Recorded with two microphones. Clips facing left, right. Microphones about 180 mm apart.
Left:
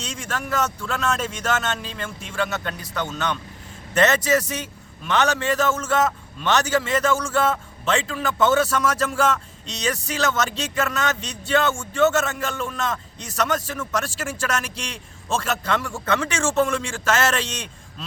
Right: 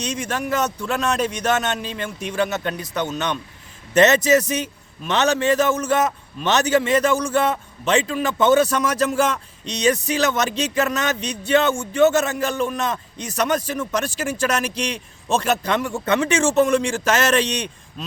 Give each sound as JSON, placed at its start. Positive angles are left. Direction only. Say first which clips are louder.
{"t": 0.0, "sound": "a man's voice", "louder": "right 5 dB", "side_deg": -20}